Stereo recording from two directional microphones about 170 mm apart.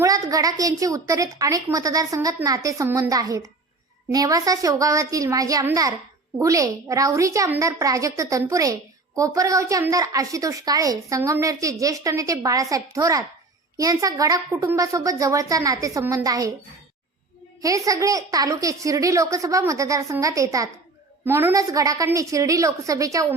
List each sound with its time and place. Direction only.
0.0 s a woman's voice: 20° right (ahead or behind)
17.6 s a woman's voice: 20° right (ahead or behind)